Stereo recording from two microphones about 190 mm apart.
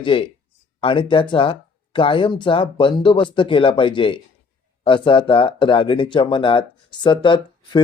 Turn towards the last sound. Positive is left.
turn(degrees=25)  # may be behind; listen again after turning